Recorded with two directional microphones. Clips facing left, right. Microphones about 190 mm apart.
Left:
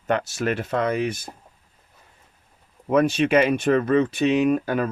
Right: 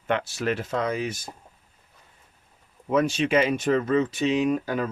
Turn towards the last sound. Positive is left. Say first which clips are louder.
# left 4 dB
turn(degrees=60)  # may be behind; listen again after turning